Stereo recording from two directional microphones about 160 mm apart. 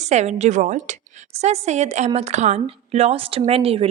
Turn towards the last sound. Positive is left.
turn(degrees=-35)  # may be behind; listen again after turning